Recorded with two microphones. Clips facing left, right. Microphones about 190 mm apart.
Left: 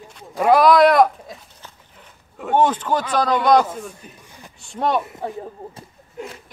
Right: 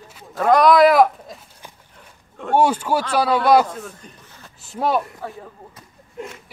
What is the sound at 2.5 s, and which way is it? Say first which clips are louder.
Speech: even; 10° right (ahead or behind).